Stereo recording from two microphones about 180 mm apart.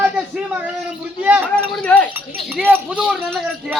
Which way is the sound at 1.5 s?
5° left (ahead or behind).